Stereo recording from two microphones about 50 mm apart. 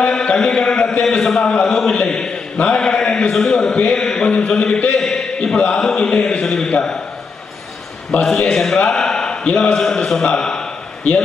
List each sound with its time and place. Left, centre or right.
0.0 s mantra: left
1.2 s a sound: centre
1.5 s a man's voice: left
2.0 s a sound: centre
3.3 s a man's voice: centre
6.7 s a man's voice: left
8.4 s a man's voice: centre